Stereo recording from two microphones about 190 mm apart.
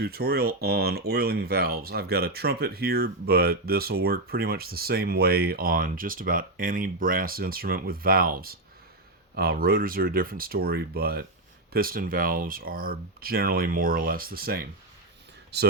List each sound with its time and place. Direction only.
0.0 s speech: 55° right (ahead or behind)